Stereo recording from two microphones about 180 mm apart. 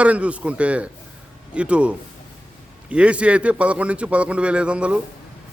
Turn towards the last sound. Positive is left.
turn(degrees=-5)  # may be behind; listen again after turning